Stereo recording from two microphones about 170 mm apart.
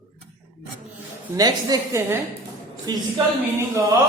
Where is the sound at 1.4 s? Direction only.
20° right (ahead or behind).